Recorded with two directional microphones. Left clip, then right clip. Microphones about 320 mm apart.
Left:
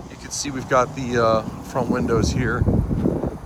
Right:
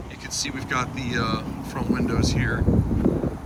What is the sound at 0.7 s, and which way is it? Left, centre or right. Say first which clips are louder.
Speech: left 8 dB; centre.